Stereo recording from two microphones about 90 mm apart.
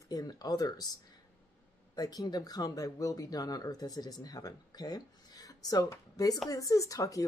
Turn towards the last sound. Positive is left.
turn(degrees=40)  # may be behind; listen again after turning